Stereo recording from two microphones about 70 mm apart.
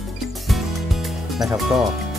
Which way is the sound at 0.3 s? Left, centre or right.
Centre.